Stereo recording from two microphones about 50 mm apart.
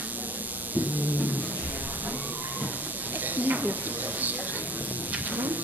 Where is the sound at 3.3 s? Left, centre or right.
Right.